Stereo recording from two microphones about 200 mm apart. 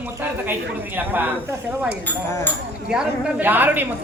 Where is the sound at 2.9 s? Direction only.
5° right (ahead or behind).